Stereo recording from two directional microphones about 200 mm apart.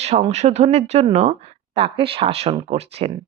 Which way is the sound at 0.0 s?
30° right (ahead or behind).